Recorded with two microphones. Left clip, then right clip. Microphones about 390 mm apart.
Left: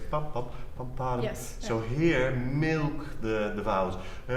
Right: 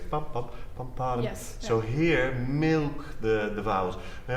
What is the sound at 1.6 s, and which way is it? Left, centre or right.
Speech, right.